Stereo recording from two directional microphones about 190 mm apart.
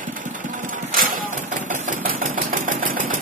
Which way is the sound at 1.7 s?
45° right (ahead or behind).